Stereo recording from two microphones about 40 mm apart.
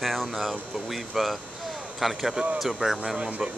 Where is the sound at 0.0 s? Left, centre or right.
Centre.